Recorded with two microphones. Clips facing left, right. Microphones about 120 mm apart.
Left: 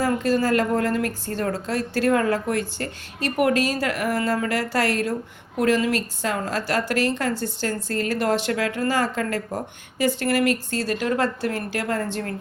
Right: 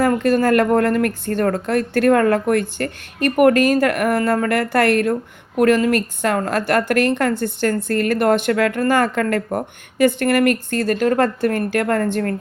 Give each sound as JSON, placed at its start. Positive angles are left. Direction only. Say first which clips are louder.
{"t": 0.0, "sound": "a woman's voice", "louder": "right 5 dB", "side_deg": -55}